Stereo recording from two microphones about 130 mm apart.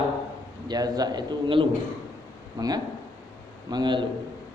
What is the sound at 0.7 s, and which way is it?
A man's voice, 30° right (ahead or behind).